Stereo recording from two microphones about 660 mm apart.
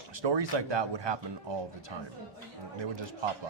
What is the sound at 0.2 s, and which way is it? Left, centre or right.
A man's voice, right.